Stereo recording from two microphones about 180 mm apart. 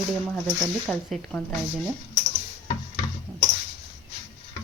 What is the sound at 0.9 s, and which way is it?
Speech, 5° left (ahead or behind).